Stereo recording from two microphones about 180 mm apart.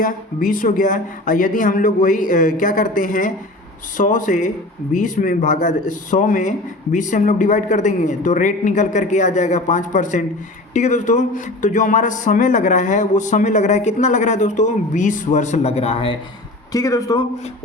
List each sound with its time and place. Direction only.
0.0 s speech: 50° left (ahead or behind); by 16.1 s 30° left (ahead or behind)
16.7 s a man's voice: 20° left (ahead or behind)